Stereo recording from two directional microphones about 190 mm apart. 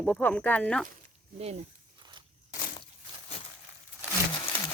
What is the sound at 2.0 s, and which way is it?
Walk, 25° right (ahead or behind).